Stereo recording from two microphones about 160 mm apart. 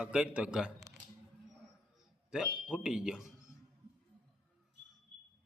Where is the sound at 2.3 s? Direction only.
5° right (ahead or behind).